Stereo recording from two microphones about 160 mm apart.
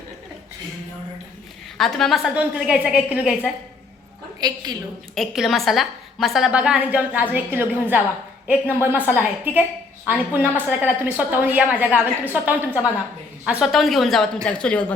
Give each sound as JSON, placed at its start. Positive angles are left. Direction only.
{"t": 1.8, "sound": "a woman's voice", "side_deg": 0}
{"t": 4.4, "sound": "a woman's voice", "side_deg": -25}
{"t": 5.1, "sound": "a woman's voice", "side_deg": 0}